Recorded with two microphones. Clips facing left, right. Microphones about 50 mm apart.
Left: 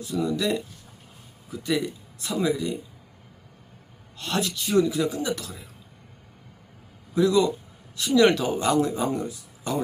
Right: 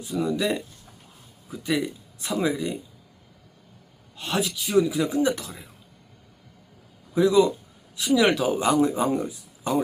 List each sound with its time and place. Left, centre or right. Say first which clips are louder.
0.0 s speech: even; centre
4.2 s speech: right 1 dB; centre
5.0 s speech: right 4 dB; right
7.1 s a man's voice: right 2 dB; centre
7.9 s speech: left 1 dB; centre